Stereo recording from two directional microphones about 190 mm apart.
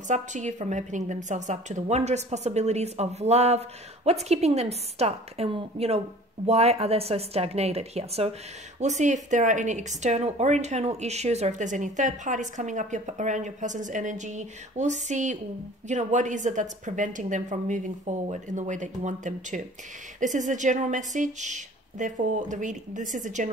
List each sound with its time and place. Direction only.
0.1 s speech: 40° right (ahead or behind)